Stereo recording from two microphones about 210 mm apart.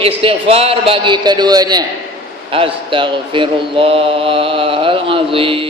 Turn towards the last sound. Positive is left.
turn(degrees=-25)  # may be behind; listen again after turning